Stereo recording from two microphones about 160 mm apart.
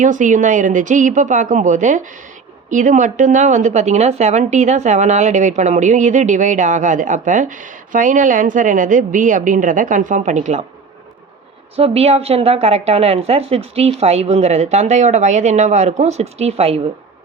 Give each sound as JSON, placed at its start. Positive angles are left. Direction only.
{"t": 0.0, "sound": "speech", "side_deg": -50}
{"t": 11.8, "sound": "a woman's voice", "side_deg": -40}